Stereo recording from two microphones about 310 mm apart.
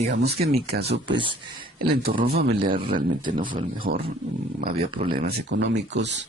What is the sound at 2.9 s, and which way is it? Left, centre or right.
Speech, centre.